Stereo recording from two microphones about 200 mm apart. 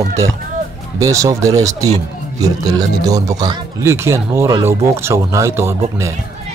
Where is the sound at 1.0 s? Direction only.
15° right (ahead or behind).